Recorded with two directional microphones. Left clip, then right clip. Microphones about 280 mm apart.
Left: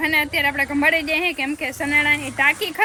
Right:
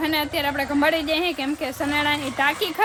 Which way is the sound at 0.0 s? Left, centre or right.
Centre.